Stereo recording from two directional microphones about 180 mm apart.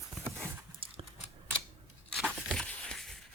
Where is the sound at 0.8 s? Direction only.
30° right (ahead or behind).